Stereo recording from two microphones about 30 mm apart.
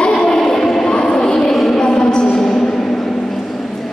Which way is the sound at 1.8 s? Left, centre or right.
Left.